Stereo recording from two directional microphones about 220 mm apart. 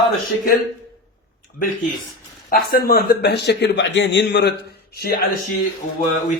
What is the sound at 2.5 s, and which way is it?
A man's voice, 40° left (ahead or behind).